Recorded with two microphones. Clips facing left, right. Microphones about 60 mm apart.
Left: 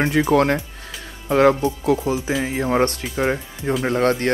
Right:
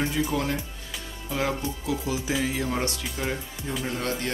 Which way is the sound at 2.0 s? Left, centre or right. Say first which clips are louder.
Left 5 dB; left.